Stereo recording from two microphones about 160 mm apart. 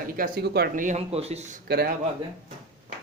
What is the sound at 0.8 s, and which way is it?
Speech, 45° right (ahead or behind).